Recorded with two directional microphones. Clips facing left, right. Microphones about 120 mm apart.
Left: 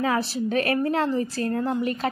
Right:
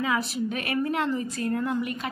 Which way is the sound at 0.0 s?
40° left (ahead or behind).